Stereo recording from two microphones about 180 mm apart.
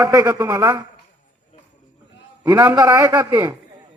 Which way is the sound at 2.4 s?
10° right (ahead or behind).